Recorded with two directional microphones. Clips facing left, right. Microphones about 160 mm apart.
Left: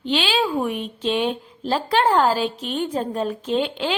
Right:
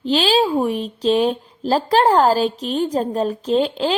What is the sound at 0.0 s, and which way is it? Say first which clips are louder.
Speech: right 5 dB; 40° right (ahead or behind).